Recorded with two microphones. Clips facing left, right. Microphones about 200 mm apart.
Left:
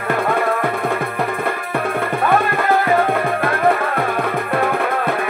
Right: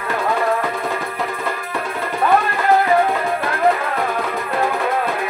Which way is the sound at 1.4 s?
60° left (ahead or behind).